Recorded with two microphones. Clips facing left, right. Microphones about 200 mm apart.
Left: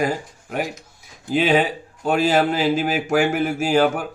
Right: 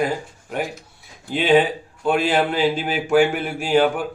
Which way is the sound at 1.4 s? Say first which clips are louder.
Right 2 dB; 40° left (ahead or behind).